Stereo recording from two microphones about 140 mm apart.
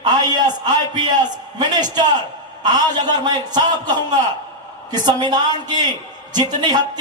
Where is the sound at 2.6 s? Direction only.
30° right (ahead or behind).